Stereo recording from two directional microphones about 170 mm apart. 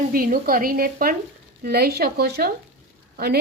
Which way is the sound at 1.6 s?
70° right (ahead or behind).